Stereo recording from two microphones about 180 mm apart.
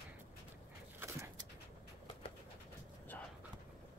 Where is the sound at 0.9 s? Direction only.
15° right (ahead or behind).